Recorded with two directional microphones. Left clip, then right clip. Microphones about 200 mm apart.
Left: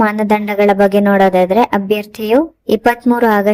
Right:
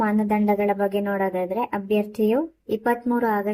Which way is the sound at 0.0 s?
40° left (ahead or behind).